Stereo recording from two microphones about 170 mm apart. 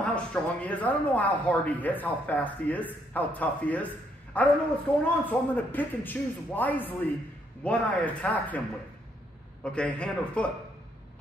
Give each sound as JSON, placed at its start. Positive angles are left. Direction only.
{"t": 0.0, "sound": "a man's voice", "side_deg": 5}
{"t": 9.6, "sound": "a man's voice", "side_deg": 5}